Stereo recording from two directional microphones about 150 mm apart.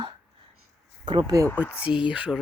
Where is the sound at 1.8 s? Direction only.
5° right (ahead or behind).